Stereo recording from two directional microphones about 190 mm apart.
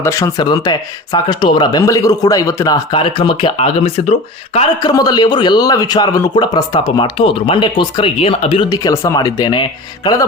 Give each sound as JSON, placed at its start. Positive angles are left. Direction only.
{"t": 0.0, "sound": "a man's voice", "side_deg": 15}
{"t": 4.9, "sound": "a man's voice", "side_deg": 20}